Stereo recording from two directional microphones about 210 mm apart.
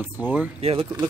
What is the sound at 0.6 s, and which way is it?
Speech, 25° right (ahead or behind).